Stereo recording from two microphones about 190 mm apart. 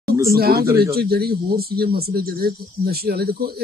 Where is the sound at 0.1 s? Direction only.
15° right (ahead or behind).